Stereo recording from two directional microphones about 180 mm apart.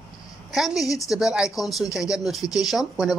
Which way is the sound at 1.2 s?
5° right (ahead or behind).